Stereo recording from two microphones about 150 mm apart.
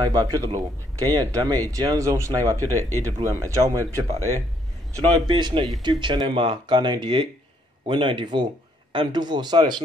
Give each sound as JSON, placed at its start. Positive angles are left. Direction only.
{"t": 0.0, "sound": "speech", "side_deg": -25}
{"t": 2.6, "sound": "speech", "side_deg": 15}
{"t": 3.0, "sound": "speech", "side_deg": -20}